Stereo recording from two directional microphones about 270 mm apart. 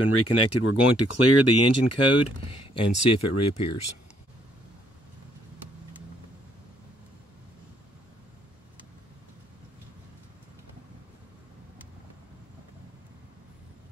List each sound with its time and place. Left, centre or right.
0.1 s speech: left